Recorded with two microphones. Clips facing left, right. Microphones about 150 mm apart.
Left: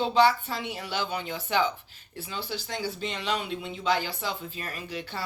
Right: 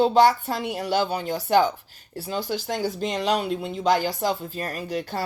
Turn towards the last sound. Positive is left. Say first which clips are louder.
# right 7 dB
turn(degrees=-45)  # may be behind; listen again after turning